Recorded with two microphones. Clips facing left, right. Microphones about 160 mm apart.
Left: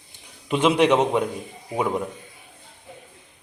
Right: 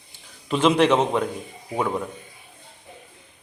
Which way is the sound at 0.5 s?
10° left (ahead or behind).